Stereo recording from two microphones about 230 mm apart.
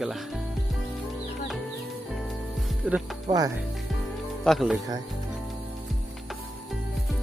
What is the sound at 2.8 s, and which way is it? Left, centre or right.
Speech, centre.